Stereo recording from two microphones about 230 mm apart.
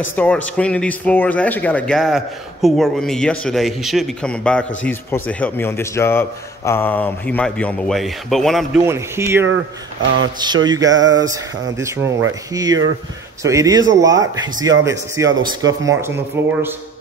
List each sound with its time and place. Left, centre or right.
0.1 s a man's voice: centre
8.8 s speech: centre